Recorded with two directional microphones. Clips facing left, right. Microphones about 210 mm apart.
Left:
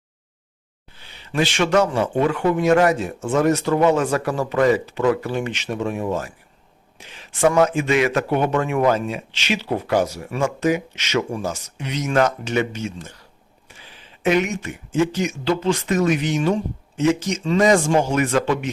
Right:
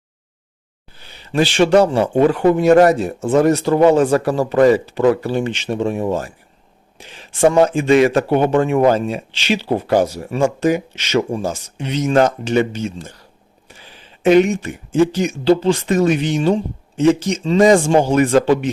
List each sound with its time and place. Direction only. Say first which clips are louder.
0.9 s speech: right 5 dB; 40° right (ahead or behind)
14.2 s speech: right 7 dB; 30° right (ahead or behind)